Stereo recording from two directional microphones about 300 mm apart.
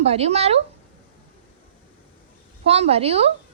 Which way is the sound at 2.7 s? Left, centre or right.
Centre.